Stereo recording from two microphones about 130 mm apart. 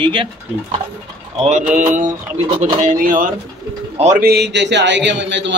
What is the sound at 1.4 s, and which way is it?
Speech, 65° right (ahead or behind).